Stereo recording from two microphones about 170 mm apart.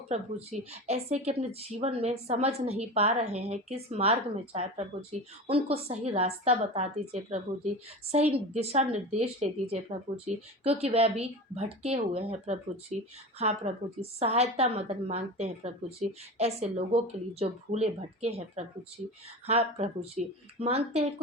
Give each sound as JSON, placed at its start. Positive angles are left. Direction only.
{"t": 0.1, "sound": "speech", "side_deg": -40}